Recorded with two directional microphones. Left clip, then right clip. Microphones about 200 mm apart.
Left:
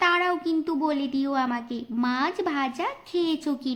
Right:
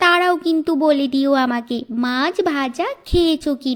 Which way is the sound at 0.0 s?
40° right (ahead or behind).